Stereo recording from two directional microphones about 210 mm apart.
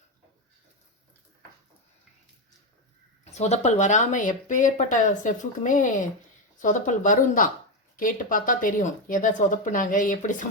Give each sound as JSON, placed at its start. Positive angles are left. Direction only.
{"t": 3.2, "sound": "speech", "side_deg": 30}